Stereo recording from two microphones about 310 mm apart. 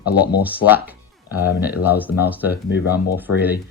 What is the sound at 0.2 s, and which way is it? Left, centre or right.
Speech, left.